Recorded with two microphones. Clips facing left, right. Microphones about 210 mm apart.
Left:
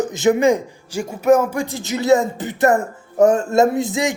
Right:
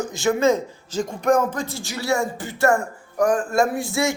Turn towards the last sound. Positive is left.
turn(degrees=15)  # may be behind; listen again after turning